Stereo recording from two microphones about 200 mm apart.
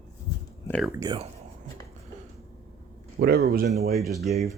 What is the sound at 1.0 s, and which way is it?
Speech, 20° right (ahead or behind).